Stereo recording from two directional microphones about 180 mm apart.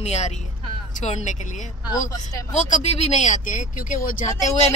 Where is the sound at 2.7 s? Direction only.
35° left (ahead or behind).